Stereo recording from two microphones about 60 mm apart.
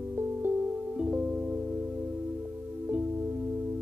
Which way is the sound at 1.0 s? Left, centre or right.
Centre.